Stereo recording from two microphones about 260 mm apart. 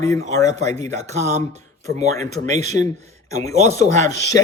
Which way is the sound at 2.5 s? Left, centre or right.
Right.